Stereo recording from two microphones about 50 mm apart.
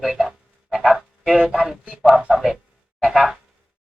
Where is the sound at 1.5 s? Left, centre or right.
Centre.